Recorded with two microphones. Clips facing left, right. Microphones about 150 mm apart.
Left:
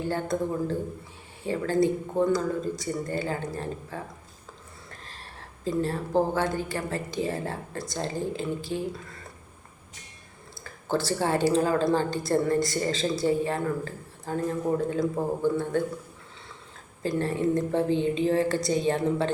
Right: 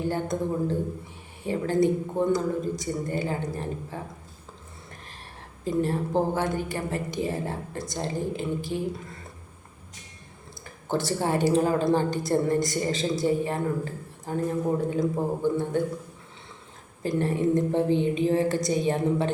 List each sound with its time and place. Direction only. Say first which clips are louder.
0.1 s speech: even; 20° right (ahead or behind)
5.6 s speech: right 2 dB; 15° right (ahead or behind)
10.6 s speech: even; 20° right (ahead or behind)
17.0 s speech: right 1 dB; 15° right (ahead or behind)